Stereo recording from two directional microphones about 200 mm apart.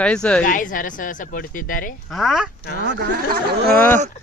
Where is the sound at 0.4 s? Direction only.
40° left (ahead or behind).